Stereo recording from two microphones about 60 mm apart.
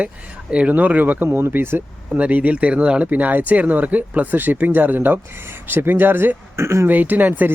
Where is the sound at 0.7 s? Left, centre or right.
Right.